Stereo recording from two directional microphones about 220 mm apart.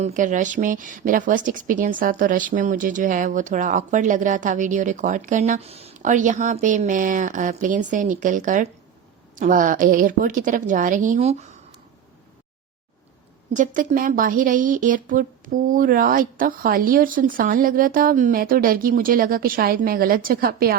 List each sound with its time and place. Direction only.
0.0 s a woman's voice: 35° right (ahead or behind)
13.5 s a woman's voice: 35° right (ahead or behind)